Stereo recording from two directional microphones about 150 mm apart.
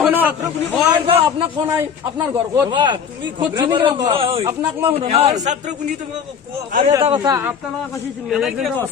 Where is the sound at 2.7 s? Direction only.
30° right (ahead or behind); by 5.7 s 50° right (ahead or behind).